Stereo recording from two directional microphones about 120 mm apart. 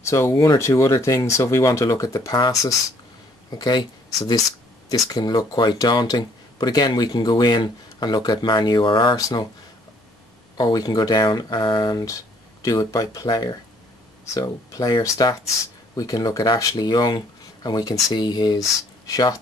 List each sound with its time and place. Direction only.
0.0 s speech: 25° left (ahead or behind)
3.5 s speech: 35° left (ahead or behind)
10.6 s speech: 35° left (ahead or behind)